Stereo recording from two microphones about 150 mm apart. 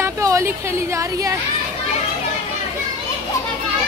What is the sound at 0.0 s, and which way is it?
Speech, 20° right (ahead or behind).